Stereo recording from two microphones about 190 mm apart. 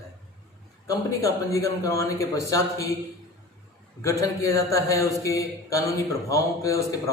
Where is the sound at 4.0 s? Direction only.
15° left (ahead or behind).